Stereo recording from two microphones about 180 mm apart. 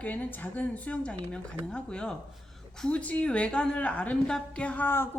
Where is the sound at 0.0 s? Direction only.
10° left (ahead or behind).